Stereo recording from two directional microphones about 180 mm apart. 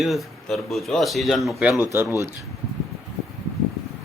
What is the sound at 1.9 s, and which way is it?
Speech, 10° right (ahead or behind).